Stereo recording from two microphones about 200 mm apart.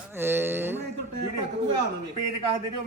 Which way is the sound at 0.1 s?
10° right (ahead or behind).